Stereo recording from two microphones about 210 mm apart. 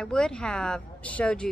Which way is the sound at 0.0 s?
5° left (ahead or behind).